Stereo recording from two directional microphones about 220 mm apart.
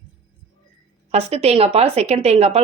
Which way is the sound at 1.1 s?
30° right (ahead or behind).